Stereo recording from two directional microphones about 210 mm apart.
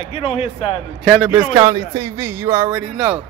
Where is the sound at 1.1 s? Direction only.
5° right (ahead or behind).